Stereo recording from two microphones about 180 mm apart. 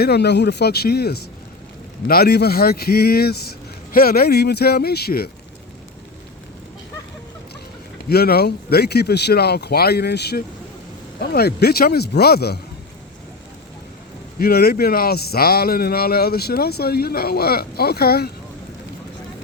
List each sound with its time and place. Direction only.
0.0 s speech: 65° left (ahead or behind)
8.1 s speech: 60° left (ahead or behind)
14.3 s speech: 60° left (ahead or behind)